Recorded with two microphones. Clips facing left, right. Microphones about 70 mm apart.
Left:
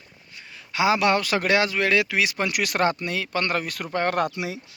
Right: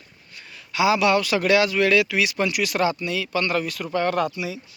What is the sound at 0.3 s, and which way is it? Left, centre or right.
A man's voice, left.